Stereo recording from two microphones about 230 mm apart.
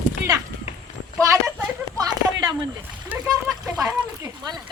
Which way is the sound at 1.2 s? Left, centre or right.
Centre.